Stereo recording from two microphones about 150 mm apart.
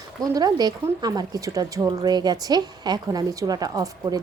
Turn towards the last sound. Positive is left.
turn(degrees=-25)  # may be behind; listen again after turning